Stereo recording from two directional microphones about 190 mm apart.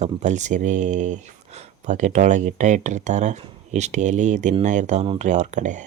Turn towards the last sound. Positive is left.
turn(degrees=-40)  # may be behind; listen again after turning